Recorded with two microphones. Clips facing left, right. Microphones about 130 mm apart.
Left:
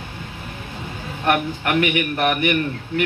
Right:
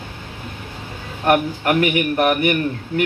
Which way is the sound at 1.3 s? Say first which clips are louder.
Right 3 dB; 35° right (ahead or behind).